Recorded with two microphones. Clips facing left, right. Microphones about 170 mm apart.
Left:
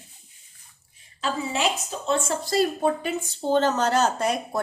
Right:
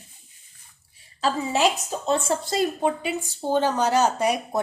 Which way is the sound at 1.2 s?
35° right (ahead or behind).